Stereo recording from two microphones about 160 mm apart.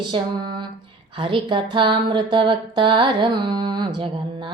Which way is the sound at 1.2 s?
30° right (ahead or behind).